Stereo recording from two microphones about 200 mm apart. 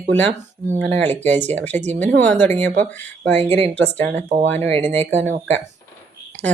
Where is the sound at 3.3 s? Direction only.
30° right (ahead or behind).